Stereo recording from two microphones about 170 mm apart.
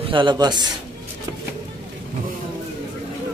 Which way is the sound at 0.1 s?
30° right (ahead or behind).